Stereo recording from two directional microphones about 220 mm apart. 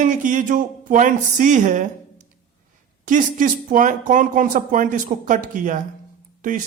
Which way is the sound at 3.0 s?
35° right (ahead or behind).